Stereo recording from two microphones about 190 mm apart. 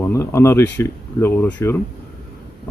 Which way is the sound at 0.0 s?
15° left (ahead or behind).